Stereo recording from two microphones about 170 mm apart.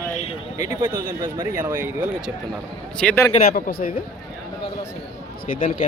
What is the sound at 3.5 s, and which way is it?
Speech, 55° left (ahead or behind).